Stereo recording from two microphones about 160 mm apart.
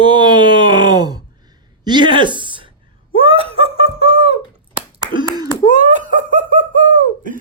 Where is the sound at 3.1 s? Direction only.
35° right (ahead or behind).